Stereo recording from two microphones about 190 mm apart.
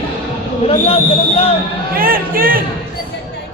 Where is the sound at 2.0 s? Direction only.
50° right (ahead or behind).